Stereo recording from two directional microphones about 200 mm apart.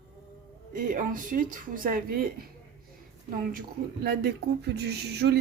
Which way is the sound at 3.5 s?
50° right (ahead or behind).